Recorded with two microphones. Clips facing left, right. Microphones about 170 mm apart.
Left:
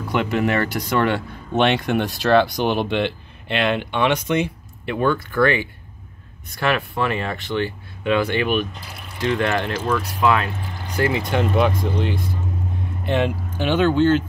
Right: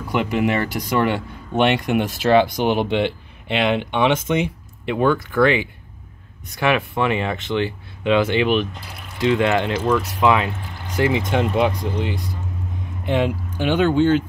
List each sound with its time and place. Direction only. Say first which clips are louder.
0.1 s speech: even; 15° right (ahead or behind)
13.0 s speech: right 1 dB; 10° right (ahead or behind)